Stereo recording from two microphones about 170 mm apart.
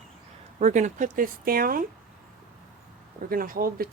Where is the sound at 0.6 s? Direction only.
45° right (ahead or behind).